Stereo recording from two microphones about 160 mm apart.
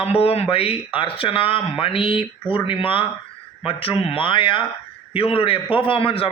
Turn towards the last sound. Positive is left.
turn(degrees=35)  # may be behind; listen again after turning